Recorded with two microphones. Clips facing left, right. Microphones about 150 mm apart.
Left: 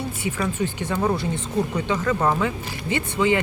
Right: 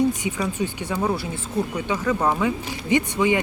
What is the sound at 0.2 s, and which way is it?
Speech, 15° right (ahead or behind).